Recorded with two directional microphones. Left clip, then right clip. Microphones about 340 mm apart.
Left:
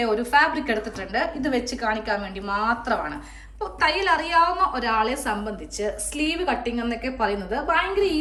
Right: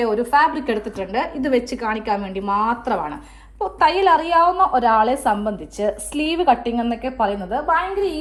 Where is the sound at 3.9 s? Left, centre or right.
Centre.